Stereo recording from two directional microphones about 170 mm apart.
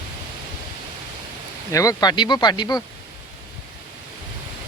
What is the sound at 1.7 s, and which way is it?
Speech, 20° left (ahead or behind).